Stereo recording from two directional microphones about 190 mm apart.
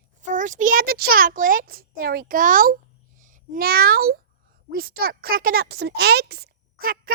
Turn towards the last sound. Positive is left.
turn(degrees=-50)  # may be behind; listen again after turning